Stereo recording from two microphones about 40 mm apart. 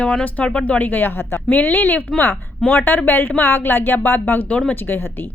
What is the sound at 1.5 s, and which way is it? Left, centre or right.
A woman's voice, left.